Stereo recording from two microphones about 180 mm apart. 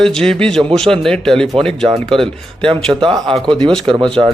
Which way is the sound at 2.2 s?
30° right (ahead or behind).